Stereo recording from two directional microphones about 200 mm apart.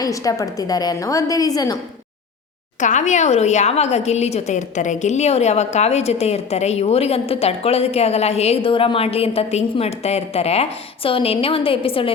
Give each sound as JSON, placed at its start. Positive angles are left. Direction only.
{"t": 0.0, "sound": "a woman's voice", "side_deg": 15}
{"t": 2.8, "sound": "a woman's voice", "side_deg": 35}